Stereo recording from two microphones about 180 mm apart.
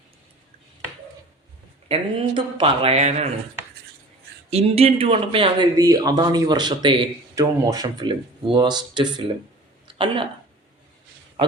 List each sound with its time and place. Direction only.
1.9 s speech: 30° right (ahead or behind)
4.4 s speech: 35° right (ahead or behind)
9.8 s a sound: 30° right (ahead or behind)